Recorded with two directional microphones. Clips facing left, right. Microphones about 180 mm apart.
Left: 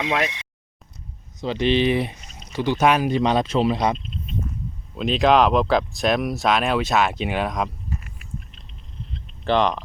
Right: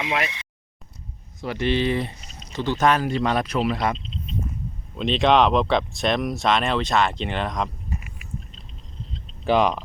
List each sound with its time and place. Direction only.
1.4 s speech: 20° left (ahead or behind)
3.9 s speech: 50° left (ahead or behind)
4.9 s speech: 5° left (ahead or behind)
7.9 s a sound: 10° right (ahead or behind)
9.4 s speech: 10° right (ahead or behind)